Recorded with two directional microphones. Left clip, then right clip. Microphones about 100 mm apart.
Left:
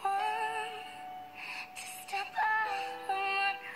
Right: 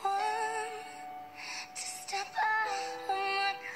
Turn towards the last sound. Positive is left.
turn(degrees=-35)  # may be behind; listen again after turning